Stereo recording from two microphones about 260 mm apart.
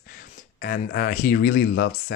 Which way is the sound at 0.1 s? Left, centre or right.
Left.